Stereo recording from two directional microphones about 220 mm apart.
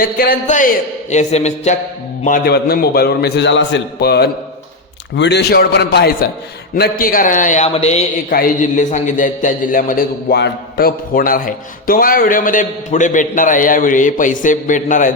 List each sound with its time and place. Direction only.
0.0 s a man's voice: 40° left (ahead or behind)